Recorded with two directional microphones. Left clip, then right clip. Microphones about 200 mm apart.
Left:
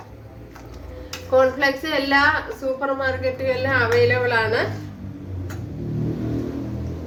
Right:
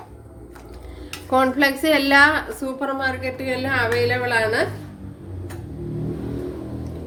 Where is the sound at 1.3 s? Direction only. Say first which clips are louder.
Left 1 dB; 45° right (ahead or behind).